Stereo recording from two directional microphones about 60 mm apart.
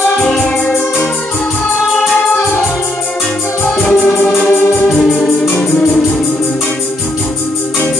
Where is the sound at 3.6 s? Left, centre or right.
Left.